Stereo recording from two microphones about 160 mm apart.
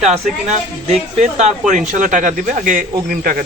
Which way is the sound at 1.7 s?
50° right (ahead or behind).